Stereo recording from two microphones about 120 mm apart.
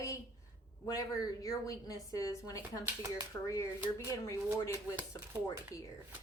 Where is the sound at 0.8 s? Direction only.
30° left (ahead or behind).